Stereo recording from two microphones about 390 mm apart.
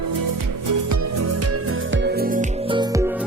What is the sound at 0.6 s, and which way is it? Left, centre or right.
Music, right.